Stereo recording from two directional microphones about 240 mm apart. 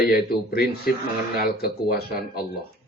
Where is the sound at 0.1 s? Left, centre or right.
Left.